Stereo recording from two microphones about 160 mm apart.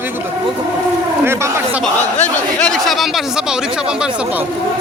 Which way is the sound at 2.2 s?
5° left (ahead or behind).